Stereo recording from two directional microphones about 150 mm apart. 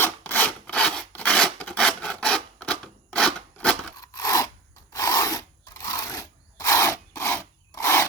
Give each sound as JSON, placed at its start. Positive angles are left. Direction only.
{"t": 0.0, "sound": "rub", "side_deg": 15}
{"t": 3.9, "sound": "a sound", "side_deg": 25}
{"t": 4.9, "sound": "filing", "side_deg": 20}